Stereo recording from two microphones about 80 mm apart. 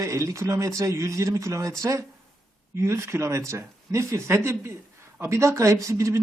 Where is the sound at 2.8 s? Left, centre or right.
Right.